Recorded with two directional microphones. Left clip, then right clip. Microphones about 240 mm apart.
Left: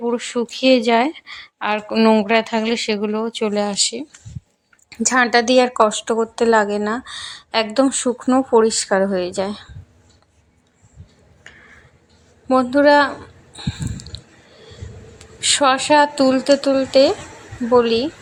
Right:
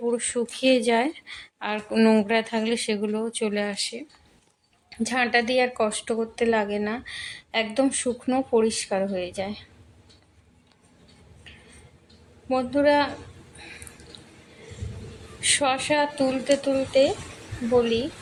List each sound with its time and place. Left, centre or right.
0.0 s speech: centre; by 4.0 s left
5.0 s a woman's voice: left
12.5 s a woman's voice: centre
14.1 s a sound: centre
15.4 s speech: centre